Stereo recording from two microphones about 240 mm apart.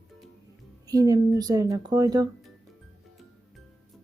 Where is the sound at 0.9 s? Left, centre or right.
Centre.